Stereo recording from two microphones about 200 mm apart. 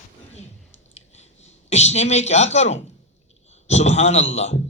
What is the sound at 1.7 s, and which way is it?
A man's voice, 35° left (ahead or behind).